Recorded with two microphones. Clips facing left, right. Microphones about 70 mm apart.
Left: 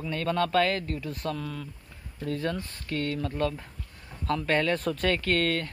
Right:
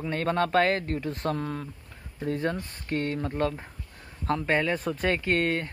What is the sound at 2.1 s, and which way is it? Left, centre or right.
Speech, right.